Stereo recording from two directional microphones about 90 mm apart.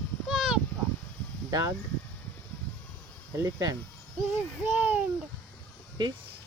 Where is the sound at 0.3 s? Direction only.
5° right (ahead or behind).